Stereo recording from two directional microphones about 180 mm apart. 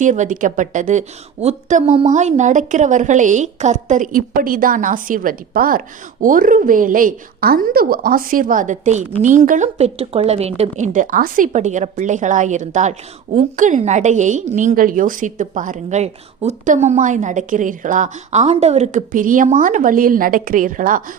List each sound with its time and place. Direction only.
0.0 s a woman's voice: 45° right (ahead or behind)